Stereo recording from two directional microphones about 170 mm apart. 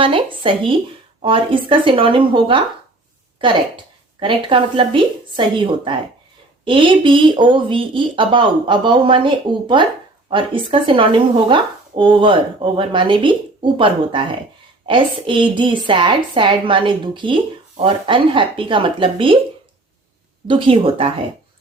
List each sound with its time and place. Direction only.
0.0 s speech: 30° right (ahead or behind)
4.2 s a woman's voice: 30° right (ahead or behind)
20.5 s speech: 30° right (ahead or behind)